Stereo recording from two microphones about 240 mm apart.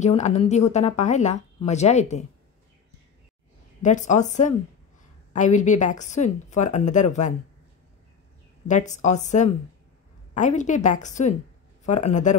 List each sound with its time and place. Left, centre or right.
0.0 s speech: left
3.8 s a woman's voice: left
8.6 s a woman's voice: left